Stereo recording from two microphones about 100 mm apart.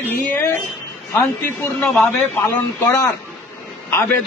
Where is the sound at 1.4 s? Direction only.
20° left (ahead or behind).